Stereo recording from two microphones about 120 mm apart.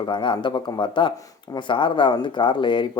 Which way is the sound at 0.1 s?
40° left (ahead or behind).